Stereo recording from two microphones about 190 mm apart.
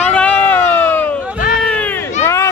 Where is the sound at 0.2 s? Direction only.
5° left (ahead or behind).